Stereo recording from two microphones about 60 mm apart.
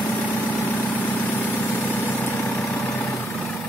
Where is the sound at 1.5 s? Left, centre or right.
Left.